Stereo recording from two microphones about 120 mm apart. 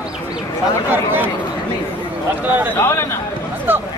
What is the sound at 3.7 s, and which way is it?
Speech, 15° right (ahead or behind).